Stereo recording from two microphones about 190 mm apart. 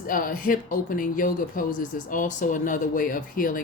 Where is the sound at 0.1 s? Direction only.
45° left (ahead or behind).